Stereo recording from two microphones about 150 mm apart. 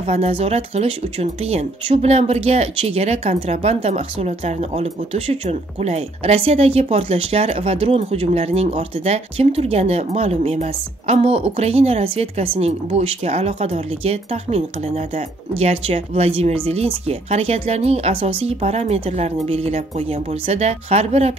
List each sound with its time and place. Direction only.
0.0 s speech: 40° right (ahead or behind)